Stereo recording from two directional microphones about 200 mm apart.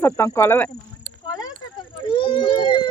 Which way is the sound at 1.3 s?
20° left (ahead or behind).